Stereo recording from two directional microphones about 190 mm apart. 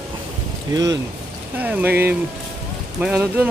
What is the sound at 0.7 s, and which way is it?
Speech, 20° right (ahead or behind).